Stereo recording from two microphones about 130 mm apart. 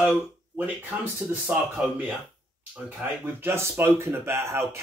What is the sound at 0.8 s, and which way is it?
Speech, 10° right (ahead or behind).